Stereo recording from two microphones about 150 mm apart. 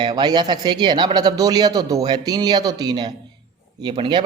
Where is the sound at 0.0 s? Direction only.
30° right (ahead or behind).